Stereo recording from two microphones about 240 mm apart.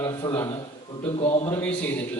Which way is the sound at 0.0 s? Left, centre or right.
Centre.